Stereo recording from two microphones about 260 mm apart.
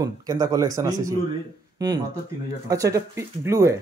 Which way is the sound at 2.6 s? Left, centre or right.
Centre.